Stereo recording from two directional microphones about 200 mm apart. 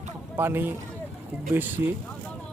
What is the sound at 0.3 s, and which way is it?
Speech, 10° right (ahead or behind).